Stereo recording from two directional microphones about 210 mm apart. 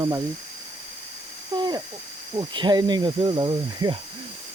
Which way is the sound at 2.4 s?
20° right (ahead or behind).